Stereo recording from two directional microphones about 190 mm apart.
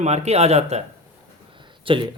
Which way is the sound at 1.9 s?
25° right (ahead or behind).